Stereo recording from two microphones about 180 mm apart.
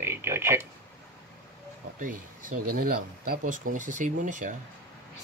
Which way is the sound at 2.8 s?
55° right (ahead or behind).